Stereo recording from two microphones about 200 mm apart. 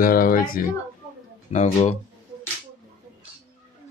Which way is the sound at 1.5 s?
35° left (ahead or behind).